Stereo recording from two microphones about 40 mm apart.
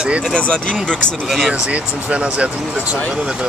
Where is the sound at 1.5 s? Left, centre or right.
Right.